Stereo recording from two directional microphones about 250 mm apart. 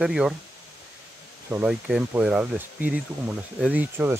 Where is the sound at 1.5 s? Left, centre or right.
Centre.